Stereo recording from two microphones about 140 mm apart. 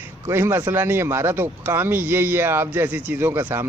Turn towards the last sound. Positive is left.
turn(degrees=-15)  # may be behind; listen again after turning